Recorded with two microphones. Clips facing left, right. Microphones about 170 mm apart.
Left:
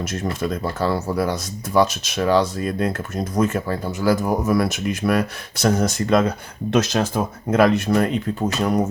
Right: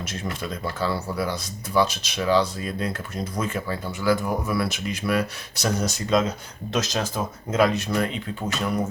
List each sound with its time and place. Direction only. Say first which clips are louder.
0.0 s speech: left 7 dB; 45° left (ahead or behind)